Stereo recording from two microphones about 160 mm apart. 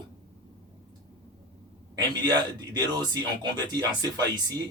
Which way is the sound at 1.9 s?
25° right (ahead or behind).